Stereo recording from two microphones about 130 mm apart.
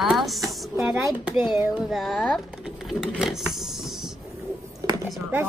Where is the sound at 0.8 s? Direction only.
10° right (ahead or behind).